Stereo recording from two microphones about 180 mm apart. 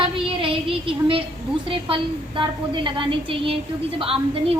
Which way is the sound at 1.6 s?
30° right (ahead or behind).